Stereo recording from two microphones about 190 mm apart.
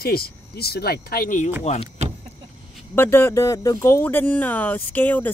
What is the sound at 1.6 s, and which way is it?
Speech, 35° left (ahead or behind).